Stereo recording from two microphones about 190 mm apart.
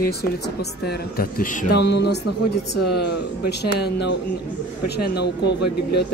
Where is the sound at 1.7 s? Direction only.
60° left (ahead or behind).